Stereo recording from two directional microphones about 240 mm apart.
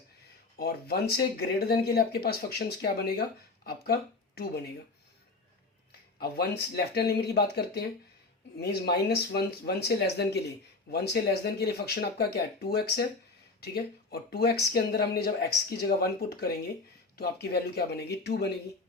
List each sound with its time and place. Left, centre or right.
0.5 s speech: left
6.1 s speech: left